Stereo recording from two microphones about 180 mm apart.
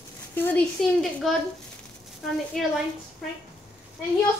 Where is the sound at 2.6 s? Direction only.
Centre (ahead or behind).